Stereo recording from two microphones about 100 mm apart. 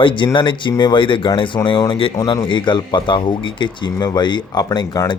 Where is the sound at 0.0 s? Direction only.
55° left (ahead or behind).